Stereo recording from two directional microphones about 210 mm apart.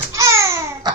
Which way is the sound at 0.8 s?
20° right (ahead or behind).